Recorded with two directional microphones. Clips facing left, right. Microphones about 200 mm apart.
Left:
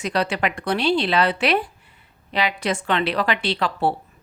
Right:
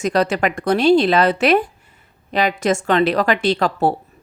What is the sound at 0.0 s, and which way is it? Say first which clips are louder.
A woman's voice: right 5 dB; 45° right (ahead or behind).